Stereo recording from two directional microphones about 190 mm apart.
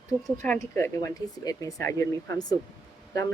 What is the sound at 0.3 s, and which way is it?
Speech, 5° left (ahead or behind).